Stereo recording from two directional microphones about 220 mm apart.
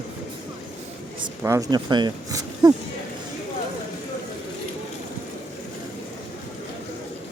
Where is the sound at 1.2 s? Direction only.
15° right (ahead or behind).